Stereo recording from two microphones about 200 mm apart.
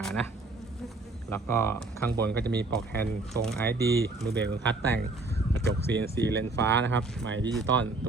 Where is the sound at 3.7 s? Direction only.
55° right (ahead or behind).